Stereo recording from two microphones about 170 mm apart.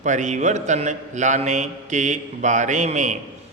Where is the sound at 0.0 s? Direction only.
45° right (ahead or behind).